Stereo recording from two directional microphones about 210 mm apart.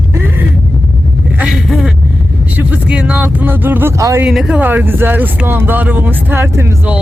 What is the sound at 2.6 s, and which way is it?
Speech, 5° right (ahead or behind).